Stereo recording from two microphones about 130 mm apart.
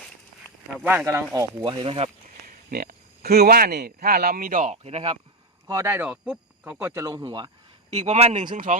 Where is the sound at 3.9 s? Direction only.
90° right; by 5.1 s 55° right (ahead or behind).